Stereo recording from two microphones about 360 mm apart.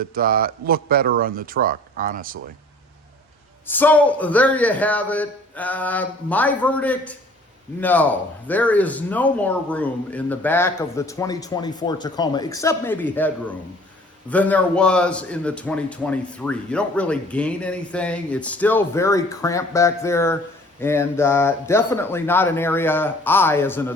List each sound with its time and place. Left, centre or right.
0.0 s speech: right
3.7 s a man's voice: centre